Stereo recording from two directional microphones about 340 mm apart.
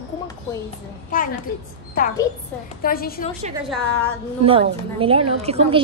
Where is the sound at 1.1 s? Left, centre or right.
Left.